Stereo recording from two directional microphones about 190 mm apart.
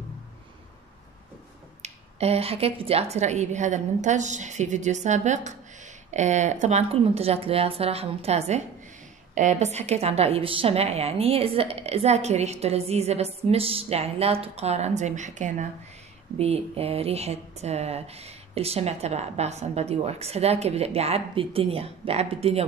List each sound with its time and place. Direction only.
1.8 s speech: 35° right (ahead or behind)